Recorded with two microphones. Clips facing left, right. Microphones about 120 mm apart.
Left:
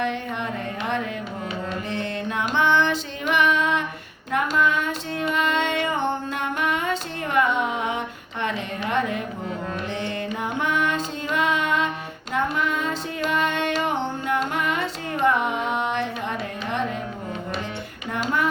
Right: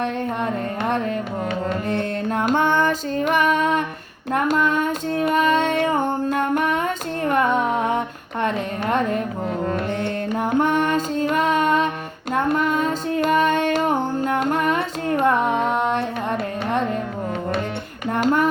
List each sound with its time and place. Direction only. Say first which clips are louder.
0.0 s carnatic music: right 3 dB; 50° right (ahead or behind)
4.3 s female singing: right 3 dB; 45° right (ahead or behind)
6.3 s music: right 5 dB; 45° right (ahead or behind)
18.1 s a sound: right 6 dB; 50° right (ahead or behind)